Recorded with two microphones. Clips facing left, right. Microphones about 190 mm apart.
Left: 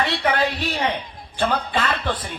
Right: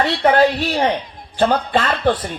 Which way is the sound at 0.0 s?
50° right (ahead or behind).